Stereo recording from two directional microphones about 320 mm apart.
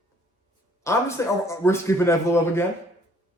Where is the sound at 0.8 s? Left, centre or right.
Centre.